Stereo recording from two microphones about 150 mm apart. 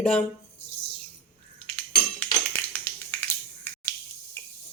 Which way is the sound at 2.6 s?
15° left (ahead or behind).